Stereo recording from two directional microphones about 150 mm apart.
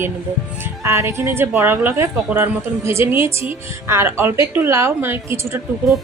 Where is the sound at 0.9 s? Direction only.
15° right (ahead or behind).